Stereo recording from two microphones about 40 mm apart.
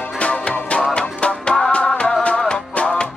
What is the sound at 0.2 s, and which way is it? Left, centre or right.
Music, left.